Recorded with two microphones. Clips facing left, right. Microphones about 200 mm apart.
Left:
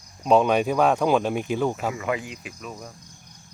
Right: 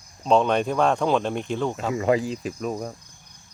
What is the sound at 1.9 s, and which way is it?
Speech, 35° right (ahead or behind).